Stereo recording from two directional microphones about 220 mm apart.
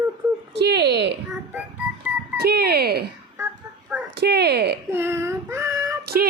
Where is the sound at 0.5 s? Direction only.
50° right (ahead or behind).